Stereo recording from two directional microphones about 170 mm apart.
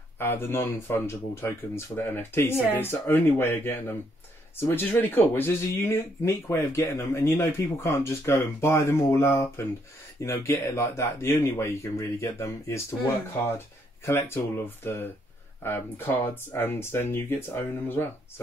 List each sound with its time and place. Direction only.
0.2 s speech: 15° left (ahead or behind)